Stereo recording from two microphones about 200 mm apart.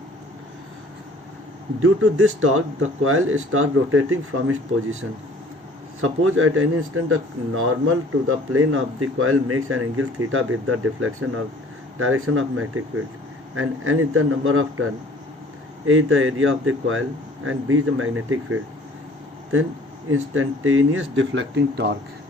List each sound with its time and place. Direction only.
1.8 s speech: 90° right
15.9 s speech: 90° right
20.1 s speech: 90° right; by 21.9 s 60° right (ahead or behind)